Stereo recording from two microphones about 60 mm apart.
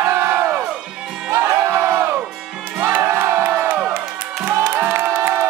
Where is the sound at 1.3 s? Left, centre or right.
Right.